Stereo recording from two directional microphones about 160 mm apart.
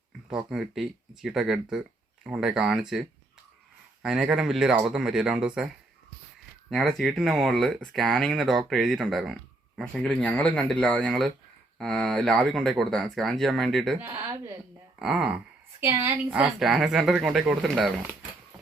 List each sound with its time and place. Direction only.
0.3 s speech: 5° right (ahead or behind)
4.0 s speech: 5° right (ahead or behind)
6.7 s speech: centre (ahead or behind)
14.1 s a woman's voice: 15° right (ahead or behind)
14.9 s speech: 5° right (ahead or behind)
15.8 s a woman's voice: 15° right (ahead or behind)
16.3 s speech: 5° right (ahead or behind)